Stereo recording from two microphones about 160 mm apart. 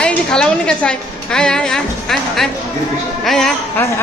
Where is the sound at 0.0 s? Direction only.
5° left (ahead or behind).